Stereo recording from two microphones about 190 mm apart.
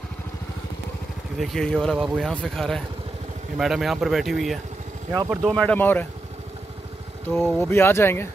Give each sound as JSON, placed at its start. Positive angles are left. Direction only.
{"t": 1.4, "sound": "speech", "side_deg": 0}
{"t": 5.1, "sound": "speech", "side_deg": -15}
{"t": 5.4, "sound": "speech", "side_deg": 5}
{"t": 7.2, "sound": "speech", "side_deg": 5}